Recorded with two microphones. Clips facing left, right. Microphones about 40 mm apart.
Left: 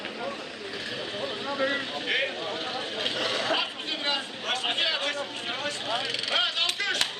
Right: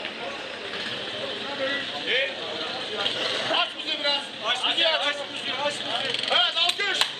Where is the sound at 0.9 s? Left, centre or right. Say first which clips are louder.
Right 1 dB; right.